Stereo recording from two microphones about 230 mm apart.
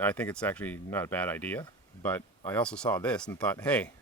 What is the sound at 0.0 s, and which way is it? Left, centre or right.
Speech, centre.